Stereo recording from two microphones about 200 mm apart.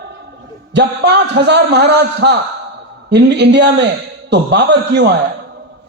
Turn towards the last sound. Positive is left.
turn(degrees=-55)  # may be behind; listen again after turning